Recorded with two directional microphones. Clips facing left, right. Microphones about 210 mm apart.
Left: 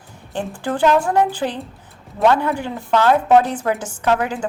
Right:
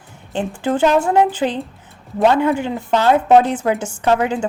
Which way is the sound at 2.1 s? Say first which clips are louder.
Right 2 dB; 25° right (ahead or behind).